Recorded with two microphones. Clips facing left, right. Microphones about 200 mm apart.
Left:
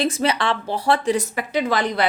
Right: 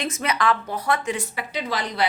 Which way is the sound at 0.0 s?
30° left (ahead or behind).